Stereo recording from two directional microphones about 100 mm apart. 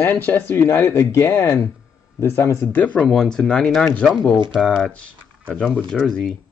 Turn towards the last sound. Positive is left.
turn(degrees=5)  # may be behind; listen again after turning